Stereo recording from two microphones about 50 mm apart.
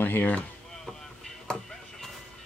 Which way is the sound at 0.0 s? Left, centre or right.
Left.